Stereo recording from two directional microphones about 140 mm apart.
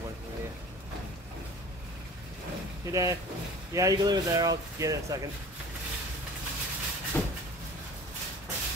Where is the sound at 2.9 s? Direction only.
25° right (ahead or behind).